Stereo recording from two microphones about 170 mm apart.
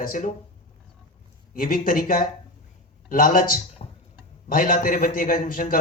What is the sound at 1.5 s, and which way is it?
Speech, 55° left (ahead or behind).